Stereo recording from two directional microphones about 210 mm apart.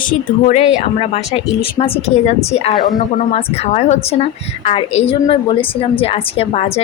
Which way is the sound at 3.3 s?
30° left (ahead or behind).